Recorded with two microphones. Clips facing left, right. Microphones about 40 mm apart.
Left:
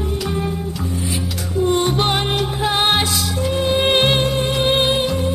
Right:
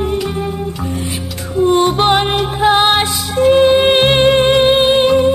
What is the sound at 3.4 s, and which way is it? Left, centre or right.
Music, right.